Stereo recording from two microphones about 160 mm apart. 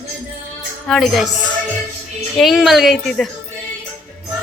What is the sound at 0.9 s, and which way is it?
Speech, centre (ahead or behind).